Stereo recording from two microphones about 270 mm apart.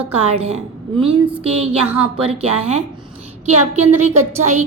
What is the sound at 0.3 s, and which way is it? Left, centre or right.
A woman's voice, right.